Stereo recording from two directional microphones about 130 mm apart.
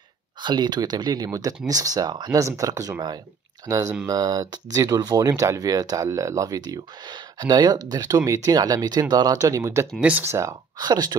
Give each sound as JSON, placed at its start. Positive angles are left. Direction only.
{"t": 0.4, "sound": "speech", "side_deg": -35}
{"t": 9.9, "sound": "speech", "side_deg": -10}